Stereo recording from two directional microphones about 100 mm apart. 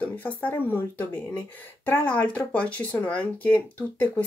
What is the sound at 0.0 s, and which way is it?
Speech, 15° left (ahead or behind).